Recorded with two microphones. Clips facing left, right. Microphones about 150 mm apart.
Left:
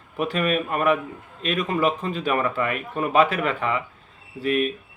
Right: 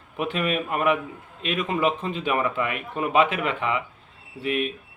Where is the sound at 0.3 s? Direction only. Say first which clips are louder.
Left 2 dB; 20° right (ahead or behind).